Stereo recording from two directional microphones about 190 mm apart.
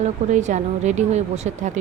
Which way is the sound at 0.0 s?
40° right (ahead or behind).